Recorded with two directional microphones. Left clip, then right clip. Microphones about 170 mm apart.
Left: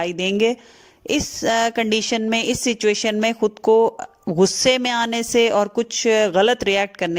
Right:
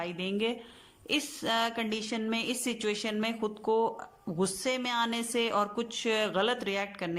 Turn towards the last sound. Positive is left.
turn(degrees=50)  # may be behind; listen again after turning